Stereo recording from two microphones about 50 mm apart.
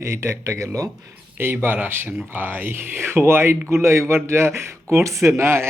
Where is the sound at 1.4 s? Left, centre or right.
Right.